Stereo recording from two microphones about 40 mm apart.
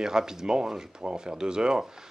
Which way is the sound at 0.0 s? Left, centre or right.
Centre.